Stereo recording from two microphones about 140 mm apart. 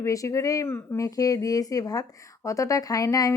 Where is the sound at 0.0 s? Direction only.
25° left (ahead or behind).